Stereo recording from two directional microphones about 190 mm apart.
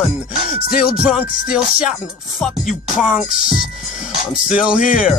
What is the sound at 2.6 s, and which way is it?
Music, centre (ahead or behind).